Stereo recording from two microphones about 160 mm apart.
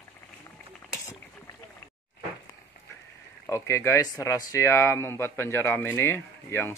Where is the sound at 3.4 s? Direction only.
15° left (ahead or behind).